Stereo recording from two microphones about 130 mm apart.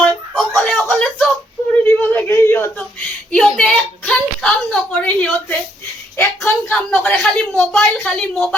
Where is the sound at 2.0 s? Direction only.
15° left (ahead or behind).